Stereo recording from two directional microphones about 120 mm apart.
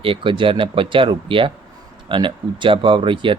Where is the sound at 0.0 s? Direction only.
45° right (ahead or behind).